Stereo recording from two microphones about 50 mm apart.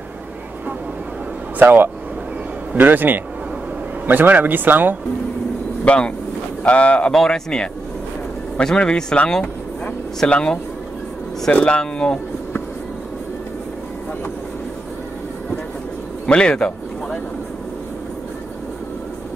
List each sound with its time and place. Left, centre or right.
1.6 s speech: right
6.6 s speech: left
7.1 s speech: centre
16.3 s speech: centre